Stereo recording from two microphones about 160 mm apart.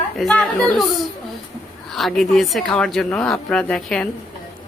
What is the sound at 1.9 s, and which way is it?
A woman's voice, centre (ahead or behind).